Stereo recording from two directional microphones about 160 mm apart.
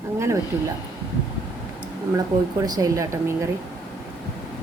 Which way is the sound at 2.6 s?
20° right (ahead or behind).